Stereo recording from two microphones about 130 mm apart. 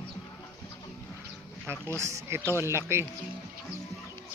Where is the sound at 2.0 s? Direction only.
25° right (ahead or behind).